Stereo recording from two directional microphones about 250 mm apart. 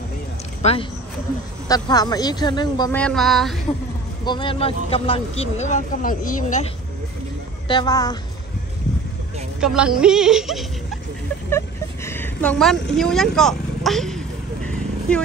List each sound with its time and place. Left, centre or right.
0.6 s speech: left
3.0 s a woman's voice: centre
4.2 s speech: centre
7.6 s speech: centre
9.6 s a woman's voice: centre
11.5 s vehicle: centre